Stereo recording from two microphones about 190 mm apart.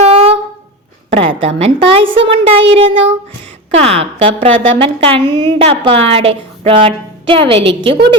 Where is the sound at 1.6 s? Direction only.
30° right (ahead or behind).